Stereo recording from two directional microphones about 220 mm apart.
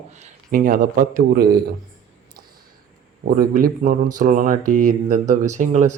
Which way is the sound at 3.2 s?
40° right (ahead or behind).